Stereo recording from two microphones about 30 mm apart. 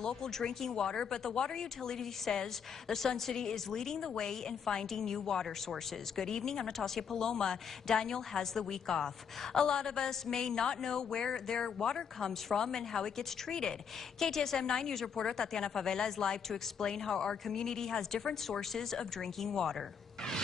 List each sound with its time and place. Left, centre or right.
0.0 s a woman's voice: centre